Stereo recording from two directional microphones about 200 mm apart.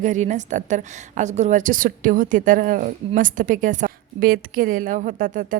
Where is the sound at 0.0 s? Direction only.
40° right (ahead or behind).